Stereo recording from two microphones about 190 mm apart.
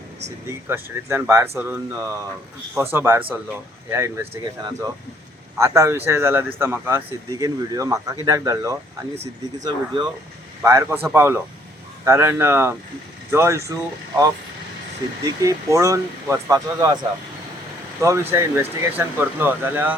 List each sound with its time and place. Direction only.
0.4 s speech: 15° right (ahead or behind)
5.5 s speech: 15° right (ahead or behind)
9.1 s speech: 35° right (ahead or behind)
9.6 s speech: 20° right (ahead or behind)
18.0 s speech: 15° right (ahead or behind)